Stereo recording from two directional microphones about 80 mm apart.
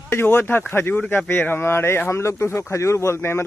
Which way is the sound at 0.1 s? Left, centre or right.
Left.